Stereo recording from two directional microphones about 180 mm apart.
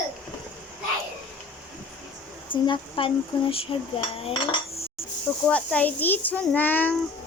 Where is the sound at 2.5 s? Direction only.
30° left (ahead or behind).